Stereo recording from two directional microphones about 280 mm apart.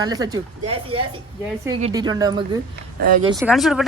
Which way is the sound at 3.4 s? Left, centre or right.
Centre.